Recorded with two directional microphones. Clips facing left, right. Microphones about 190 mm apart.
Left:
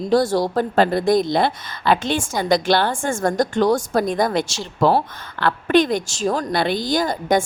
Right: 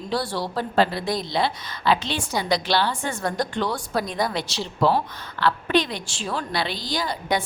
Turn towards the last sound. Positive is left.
turn(degrees=45)  # may be behind; listen again after turning